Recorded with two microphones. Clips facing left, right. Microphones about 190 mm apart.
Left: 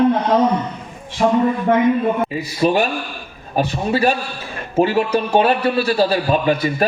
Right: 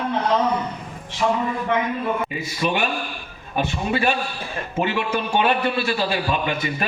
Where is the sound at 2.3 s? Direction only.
35° left (ahead or behind).